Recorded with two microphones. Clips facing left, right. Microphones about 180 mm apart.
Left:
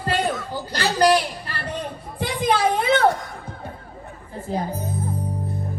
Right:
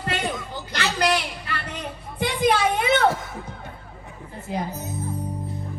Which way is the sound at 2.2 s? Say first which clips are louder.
Even; 30° left (ahead or behind).